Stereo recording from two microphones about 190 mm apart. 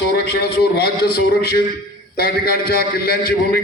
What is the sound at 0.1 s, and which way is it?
A man's voice, 55° left (ahead or behind).